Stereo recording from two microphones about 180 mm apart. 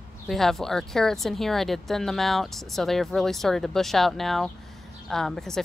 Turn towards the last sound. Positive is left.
turn(degrees=0)  # may be behind; listen again after turning